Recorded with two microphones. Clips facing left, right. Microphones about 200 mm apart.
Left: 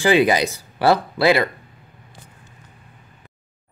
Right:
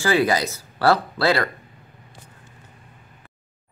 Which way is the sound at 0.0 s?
15° left (ahead or behind).